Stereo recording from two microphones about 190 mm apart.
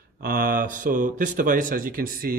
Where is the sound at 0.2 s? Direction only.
50° right (ahead or behind).